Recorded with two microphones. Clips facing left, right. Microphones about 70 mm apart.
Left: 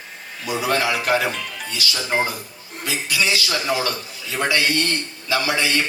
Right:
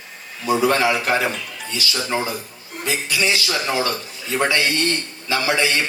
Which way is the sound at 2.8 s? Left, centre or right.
Right.